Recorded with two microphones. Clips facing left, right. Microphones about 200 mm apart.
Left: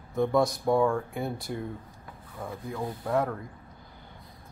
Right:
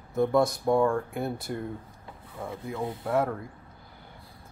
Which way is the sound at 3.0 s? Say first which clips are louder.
Right 1 dB; 5° right (ahead or behind).